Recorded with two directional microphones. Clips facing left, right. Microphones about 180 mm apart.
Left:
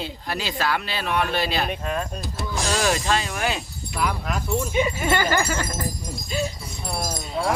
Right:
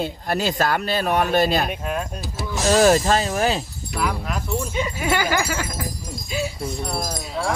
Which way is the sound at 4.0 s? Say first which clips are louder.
Right 1 dB; centre (ahead or behind).